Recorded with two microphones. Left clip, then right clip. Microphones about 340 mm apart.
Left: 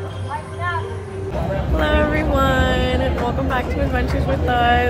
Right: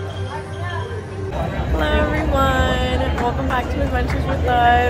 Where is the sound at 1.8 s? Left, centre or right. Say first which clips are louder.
Left 1 dB; centre.